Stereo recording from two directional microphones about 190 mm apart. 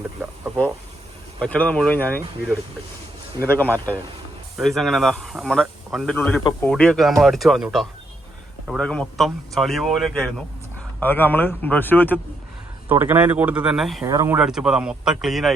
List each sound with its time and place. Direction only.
0.2 s speech: 15° right (ahead or behind)
1.4 s speech: 10° left (ahead or behind)
3.4 s speech: 10° left (ahead or behind)
12.9 s speech: 10° right (ahead or behind)
14.0 s speech: 15° right (ahead or behind)
14.3 s speech: 5° right (ahead or behind)